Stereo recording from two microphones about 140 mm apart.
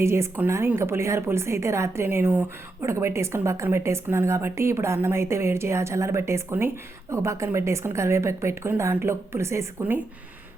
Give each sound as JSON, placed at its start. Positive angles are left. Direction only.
{"t": 0.0, "sound": "a woman's voice", "side_deg": -20}